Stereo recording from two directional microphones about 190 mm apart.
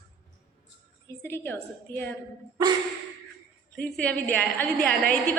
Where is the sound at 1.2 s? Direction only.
10° left (ahead or behind).